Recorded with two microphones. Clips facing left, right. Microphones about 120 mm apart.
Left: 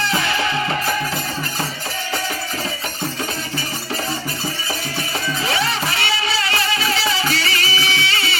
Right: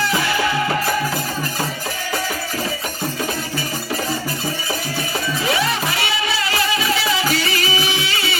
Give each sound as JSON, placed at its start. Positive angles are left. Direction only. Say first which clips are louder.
{"t": 0.0, "sound": "music", "louder": "right 1 dB", "side_deg": 25}
{"t": 5.5, "sound": "music", "louder": "right 2 dB", "side_deg": 30}